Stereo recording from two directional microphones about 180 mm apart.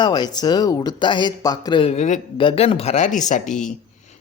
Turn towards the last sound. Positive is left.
turn(degrees=45)  # may be behind; listen again after turning